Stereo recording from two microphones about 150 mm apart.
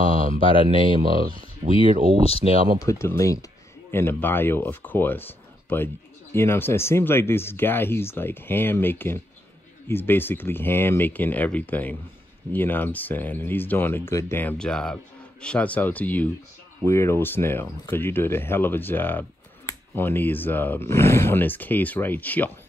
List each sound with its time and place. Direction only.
0.4 s speech: 35° left (ahead or behind)
1.6 s speech: 35° right (ahead or behind)
2.2 s speech: 40° left (ahead or behind)
2.8 s speech: 20° left (ahead or behind)